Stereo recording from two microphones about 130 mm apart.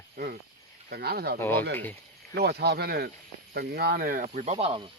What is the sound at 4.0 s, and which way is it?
Speech, 90° right.